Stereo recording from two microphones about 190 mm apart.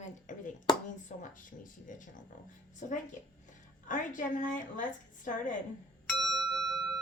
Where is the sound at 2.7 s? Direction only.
40° left (ahead or behind).